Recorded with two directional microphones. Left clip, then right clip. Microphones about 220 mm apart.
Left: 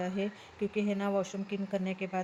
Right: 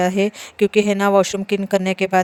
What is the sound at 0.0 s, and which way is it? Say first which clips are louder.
Speech: right 17 dB; 50° right (ahead or behind).